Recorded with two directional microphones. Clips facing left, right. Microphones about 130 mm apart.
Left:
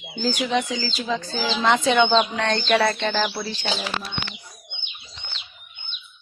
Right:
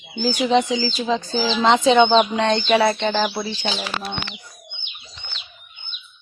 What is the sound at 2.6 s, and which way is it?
Bird, 10° right (ahead or behind).